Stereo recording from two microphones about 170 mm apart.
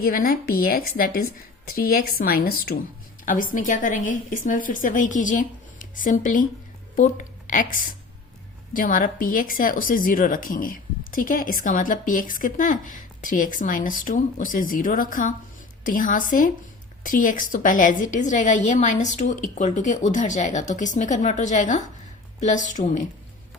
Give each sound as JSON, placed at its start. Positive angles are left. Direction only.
{"t": 0.0, "sound": "a woman's voice", "side_deg": 60}